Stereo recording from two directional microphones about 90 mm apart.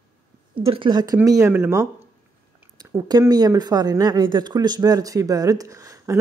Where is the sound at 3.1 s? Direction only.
45° right (ahead or behind).